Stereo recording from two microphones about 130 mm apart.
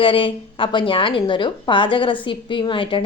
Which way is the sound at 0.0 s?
40° left (ahead or behind).